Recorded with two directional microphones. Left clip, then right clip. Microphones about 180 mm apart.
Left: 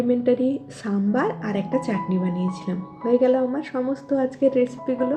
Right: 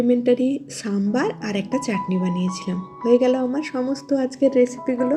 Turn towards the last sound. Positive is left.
turn(degrees=-30)  # may be behind; listen again after turning